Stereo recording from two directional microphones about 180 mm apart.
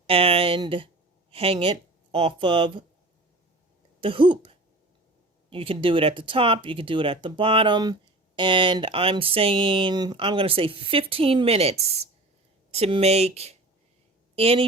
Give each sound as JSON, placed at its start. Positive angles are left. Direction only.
{"t": 0.1, "sound": "speech", "side_deg": -30}
{"t": 4.0, "sound": "speech", "side_deg": -30}